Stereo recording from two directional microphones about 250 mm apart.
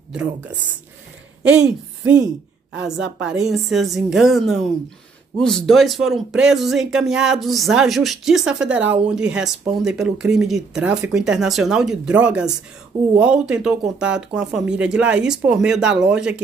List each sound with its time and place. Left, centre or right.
0.1 s speech: centre
2.7 s a woman's voice: right
3.2 s speech: centre